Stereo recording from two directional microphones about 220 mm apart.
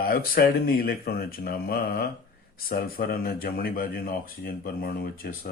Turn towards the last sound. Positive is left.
turn(degrees=45)  # may be behind; listen again after turning